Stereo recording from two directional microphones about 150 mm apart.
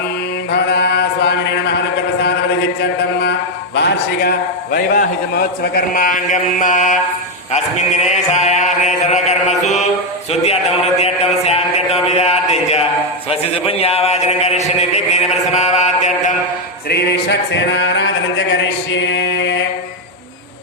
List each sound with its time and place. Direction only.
0.5 s chant: 90° left
4.2 s a man's voice: 90° left; by 7.0 s 55° left (ahead or behind)
7.5 s mantra: 50° left (ahead or behind)
10.4 s a sound: 40° left (ahead or behind)
13.3 s a man's voice: 40° left (ahead or behind)
16.9 s music: 90° left